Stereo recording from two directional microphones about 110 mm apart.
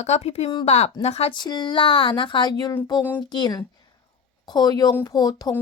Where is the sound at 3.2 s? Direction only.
40° left (ahead or behind).